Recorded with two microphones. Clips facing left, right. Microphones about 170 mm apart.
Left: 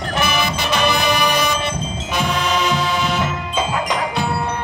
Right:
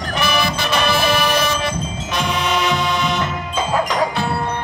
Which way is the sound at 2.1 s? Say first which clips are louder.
Even; 5° left (ahead or behind).